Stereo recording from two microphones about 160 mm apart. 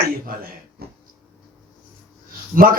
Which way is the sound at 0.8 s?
80° right.